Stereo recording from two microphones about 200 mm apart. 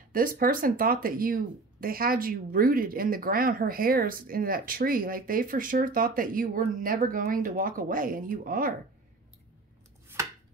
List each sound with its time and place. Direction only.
0.1 s speech: 45° right (ahead or behind)